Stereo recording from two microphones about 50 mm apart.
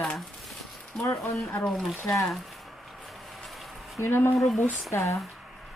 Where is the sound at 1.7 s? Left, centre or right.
Centre.